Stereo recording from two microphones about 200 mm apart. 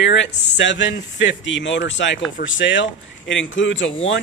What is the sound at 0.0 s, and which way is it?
Speech, 65° left (ahead or behind).